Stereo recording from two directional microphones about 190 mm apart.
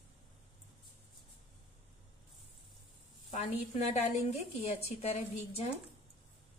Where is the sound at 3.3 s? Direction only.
35° left (ahead or behind).